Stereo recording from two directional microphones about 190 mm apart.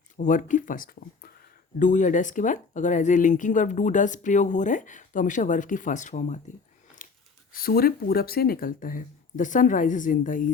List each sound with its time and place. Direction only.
0.2 s speech: 40° left (ahead or behind)
7.0 s a sound: 45° left (ahead or behind)
7.5 s speech: 50° left (ahead or behind)